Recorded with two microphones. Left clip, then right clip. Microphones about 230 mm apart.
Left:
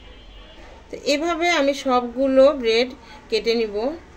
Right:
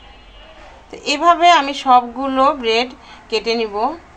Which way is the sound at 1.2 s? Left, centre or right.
Right.